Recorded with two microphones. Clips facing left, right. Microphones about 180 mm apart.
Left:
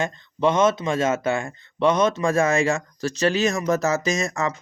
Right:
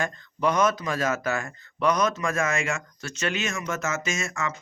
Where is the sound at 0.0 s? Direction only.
25° left (ahead or behind).